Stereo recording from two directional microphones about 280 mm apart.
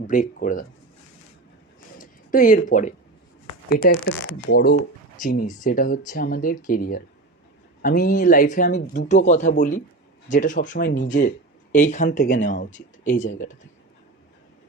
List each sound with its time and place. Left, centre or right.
0.1 s speech: left
2.0 s a sound: left
3.7 s speech: left